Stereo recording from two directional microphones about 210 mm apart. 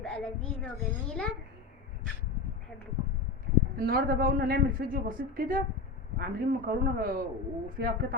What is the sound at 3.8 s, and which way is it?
Speech, 45° right (ahead or behind).